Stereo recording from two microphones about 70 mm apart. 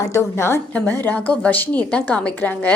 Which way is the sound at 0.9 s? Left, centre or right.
Left.